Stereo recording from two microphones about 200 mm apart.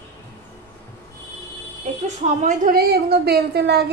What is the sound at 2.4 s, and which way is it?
A woman's voice, 45° right (ahead or behind).